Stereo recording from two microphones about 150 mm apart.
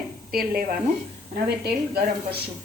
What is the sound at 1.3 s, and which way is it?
Speech, 90° right.